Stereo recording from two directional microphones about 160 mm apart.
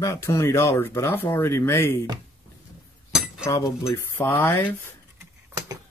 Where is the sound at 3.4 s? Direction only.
20° left (ahead or behind).